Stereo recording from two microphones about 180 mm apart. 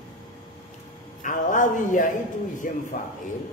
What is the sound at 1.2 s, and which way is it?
A man's voice, 45° left (ahead or behind).